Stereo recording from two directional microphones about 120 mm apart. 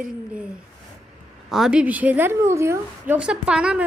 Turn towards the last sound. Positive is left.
turn(degrees=-5)  # may be behind; listen again after turning